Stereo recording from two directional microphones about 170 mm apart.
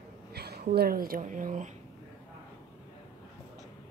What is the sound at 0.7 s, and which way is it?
Speech, 65° right (ahead or behind).